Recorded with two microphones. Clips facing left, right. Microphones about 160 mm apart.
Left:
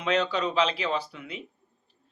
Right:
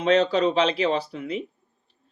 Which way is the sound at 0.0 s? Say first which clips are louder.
Right 7 dB; 40° right (ahead or behind).